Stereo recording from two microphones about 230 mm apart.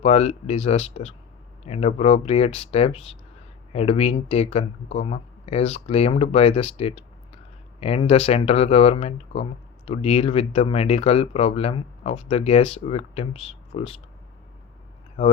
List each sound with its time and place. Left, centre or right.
0.0 s speech: left